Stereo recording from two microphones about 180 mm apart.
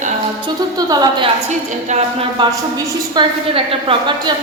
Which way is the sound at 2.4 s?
25° right (ahead or behind).